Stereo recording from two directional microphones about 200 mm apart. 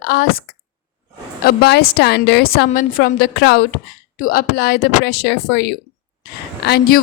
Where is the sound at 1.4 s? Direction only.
50° left (ahead or behind).